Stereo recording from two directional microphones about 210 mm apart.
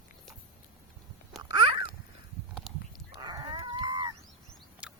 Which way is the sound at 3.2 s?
20° right (ahead or behind).